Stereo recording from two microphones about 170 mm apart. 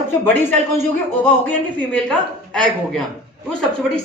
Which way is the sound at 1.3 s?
10° left (ahead or behind).